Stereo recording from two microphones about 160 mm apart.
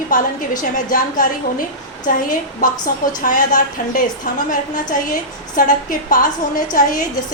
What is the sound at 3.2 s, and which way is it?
A woman's voice, 55° left (ahead or behind).